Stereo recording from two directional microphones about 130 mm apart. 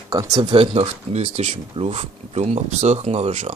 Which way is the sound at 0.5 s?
45° right (ahead or behind).